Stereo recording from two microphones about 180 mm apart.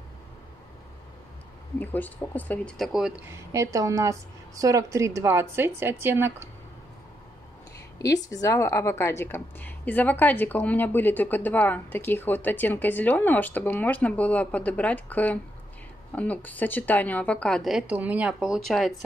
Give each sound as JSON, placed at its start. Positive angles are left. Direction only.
{"t": 1.8, "sound": "a woman's voice", "side_deg": 10}
{"t": 3.3, "sound": "a woman's voice", "side_deg": -15}
{"t": 8.0, "sound": "a woman's voice", "side_deg": 20}